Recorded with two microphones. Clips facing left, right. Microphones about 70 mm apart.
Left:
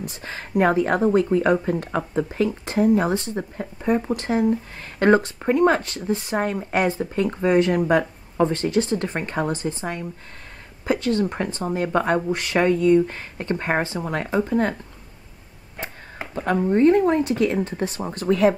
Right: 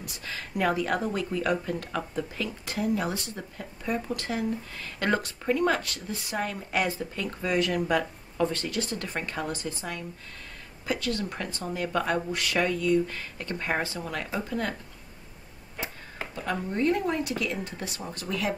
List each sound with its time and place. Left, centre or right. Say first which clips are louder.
0.0 s speech: left 5 dB; left
16.5 s speech: left 11 dB; left